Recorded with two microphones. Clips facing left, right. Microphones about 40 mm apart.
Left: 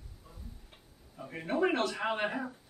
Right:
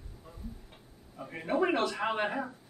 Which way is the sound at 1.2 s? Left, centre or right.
Centre.